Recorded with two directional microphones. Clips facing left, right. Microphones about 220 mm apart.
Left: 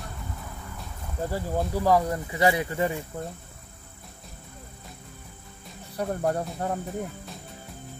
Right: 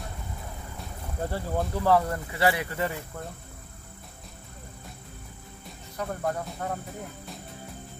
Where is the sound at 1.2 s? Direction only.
10° left (ahead or behind).